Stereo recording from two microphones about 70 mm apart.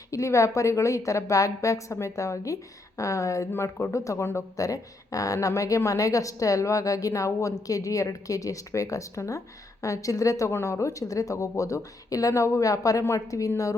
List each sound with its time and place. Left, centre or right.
0.1 s a woman's voice: left
3.5 s speech: left
3.9 s a woman's voice: left